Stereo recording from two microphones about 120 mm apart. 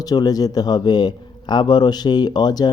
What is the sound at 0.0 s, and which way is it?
Speech, 30° left (ahead or behind).